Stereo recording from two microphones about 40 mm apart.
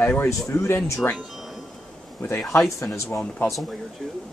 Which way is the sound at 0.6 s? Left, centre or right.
Left.